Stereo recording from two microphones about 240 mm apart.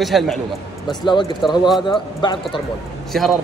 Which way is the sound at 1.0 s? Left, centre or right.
Centre.